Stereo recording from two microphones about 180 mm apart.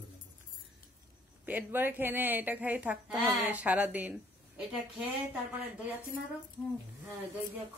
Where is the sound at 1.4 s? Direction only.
10° right (ahead or behind).